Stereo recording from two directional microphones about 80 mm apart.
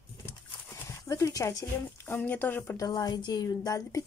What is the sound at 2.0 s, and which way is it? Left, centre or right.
Speech, left.